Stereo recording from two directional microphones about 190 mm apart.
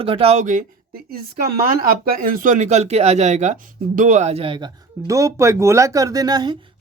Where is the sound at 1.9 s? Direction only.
50° right (ahead or behind).